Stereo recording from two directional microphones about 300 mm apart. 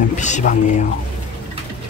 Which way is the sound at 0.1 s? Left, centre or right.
Left.